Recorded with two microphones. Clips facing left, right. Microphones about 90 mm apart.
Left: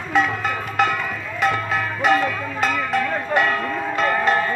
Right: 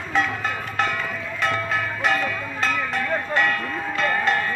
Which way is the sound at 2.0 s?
5° left (ahead or behind).